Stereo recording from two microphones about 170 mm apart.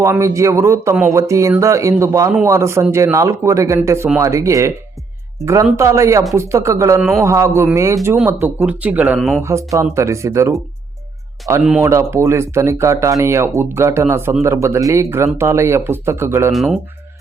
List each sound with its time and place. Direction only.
0.0 s speech: 15° right (ahead or behind)
5.7 s speech: 15° right (ahead or behind); by 9.4 s centre (ahead or behind)
9.4 s speech: 15° right (ahead or behind)
16.5 s speech: centre (ahead or behind)